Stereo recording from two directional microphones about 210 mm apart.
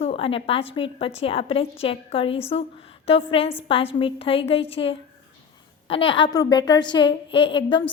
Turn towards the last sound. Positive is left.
turn(degrees=25)  # may be behind; listen again after turning